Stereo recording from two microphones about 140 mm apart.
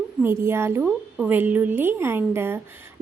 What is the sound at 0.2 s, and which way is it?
A woman's voice, 15° right (ahead or behind).